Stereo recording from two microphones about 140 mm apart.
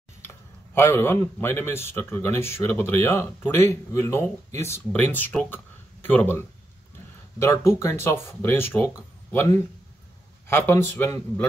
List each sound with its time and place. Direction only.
0.7 s a man's voice: 15° left (ahead or behind)
10.5 s a man's voice: 15° left (ahead or behind)